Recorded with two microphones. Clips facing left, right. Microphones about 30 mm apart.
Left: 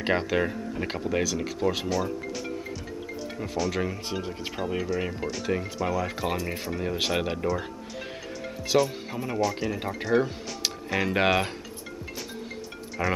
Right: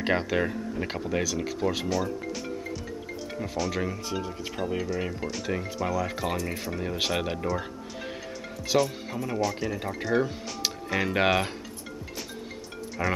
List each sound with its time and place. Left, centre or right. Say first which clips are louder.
0.0 s speech: left 1 dB; centre
3.3 s speech: left 1 dB; centre
4.1 s speech: even; centre
4.6 s speech: left 1 dB; centre
8.6 s speech: left 1 dB; centre
13.0 s speech: left 1 dB; centre